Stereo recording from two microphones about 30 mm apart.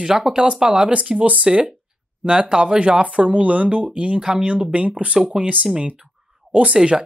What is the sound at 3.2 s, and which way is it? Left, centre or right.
Speech, right.